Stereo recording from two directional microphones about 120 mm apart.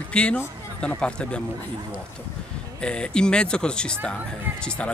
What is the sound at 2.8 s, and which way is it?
Speech, 5° left (ahead or behind).